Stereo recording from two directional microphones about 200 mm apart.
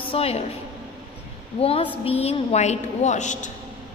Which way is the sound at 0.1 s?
30° left (ahead or behind).